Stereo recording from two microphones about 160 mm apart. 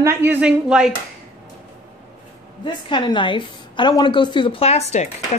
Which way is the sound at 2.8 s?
30° left (ahead or behind).